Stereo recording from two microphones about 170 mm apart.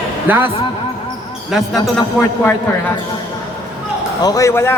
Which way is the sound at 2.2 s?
10° right (ahead or behind).